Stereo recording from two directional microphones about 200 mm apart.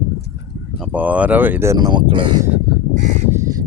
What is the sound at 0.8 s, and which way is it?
Speech, 5° right (ahead or behind).